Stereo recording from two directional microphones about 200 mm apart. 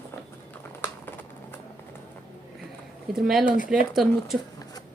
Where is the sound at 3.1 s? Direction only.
Centre (ahead or behind).